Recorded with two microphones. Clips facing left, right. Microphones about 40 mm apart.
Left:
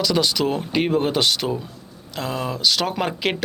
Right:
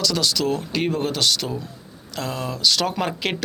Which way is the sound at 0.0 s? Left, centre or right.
Centre.